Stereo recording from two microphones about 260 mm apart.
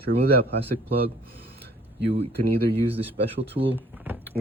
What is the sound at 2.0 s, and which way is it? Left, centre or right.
Speech, right.